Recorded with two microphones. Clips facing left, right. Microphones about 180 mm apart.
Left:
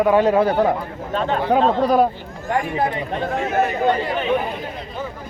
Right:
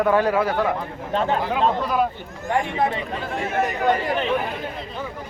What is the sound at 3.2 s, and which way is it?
Speech, 40° left (ahead or behind).